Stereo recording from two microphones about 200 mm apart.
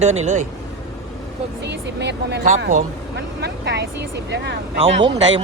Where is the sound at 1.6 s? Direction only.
60° right (ahead or behind).